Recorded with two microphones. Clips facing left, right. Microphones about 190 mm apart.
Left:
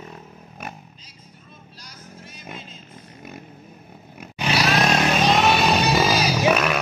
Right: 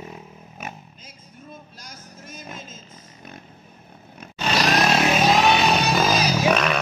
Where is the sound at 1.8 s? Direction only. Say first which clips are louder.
Left 3 dB; 45° right (ahead or behind).